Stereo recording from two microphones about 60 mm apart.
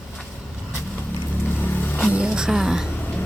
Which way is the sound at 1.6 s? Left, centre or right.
Left.